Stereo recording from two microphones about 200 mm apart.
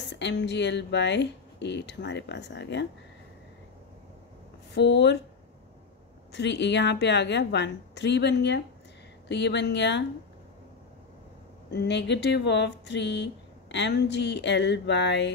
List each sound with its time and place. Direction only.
0.1 s speech: 60° left (ahead or behind)
4.7 s speech: 60° left (ahead or behind)
6.3 s speech: 60° left (ahead or behind)
11.7 s speech: 55° left (ahead or behind)